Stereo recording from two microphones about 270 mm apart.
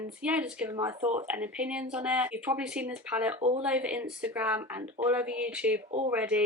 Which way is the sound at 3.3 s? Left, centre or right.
Right.